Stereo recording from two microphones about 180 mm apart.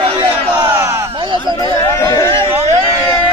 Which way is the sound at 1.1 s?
25° right (ahead or behind).